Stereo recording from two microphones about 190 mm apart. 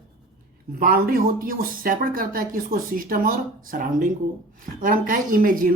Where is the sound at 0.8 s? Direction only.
50° right (ahead or behind).